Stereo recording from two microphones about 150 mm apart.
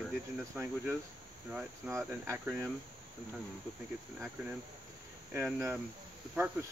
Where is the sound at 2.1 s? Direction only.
15° right (ahead or behind).